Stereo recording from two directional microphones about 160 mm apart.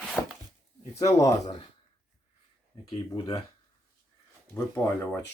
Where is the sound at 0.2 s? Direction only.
5° left (ahead or behind).